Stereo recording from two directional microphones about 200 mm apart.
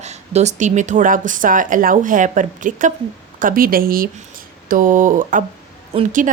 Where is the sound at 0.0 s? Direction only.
35° right (ahead or behind).